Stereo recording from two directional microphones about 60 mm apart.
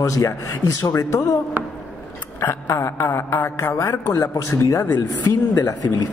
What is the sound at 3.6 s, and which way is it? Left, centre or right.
A man's voice, left.